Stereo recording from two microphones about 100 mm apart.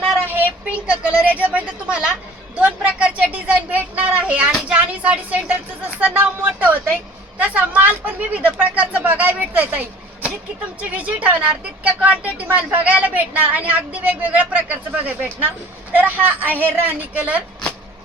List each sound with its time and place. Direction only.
0.3 s a woman's voice: 15° right (ahead or behind)
10.9 s a woman's voice: 15° right (ahead or behind)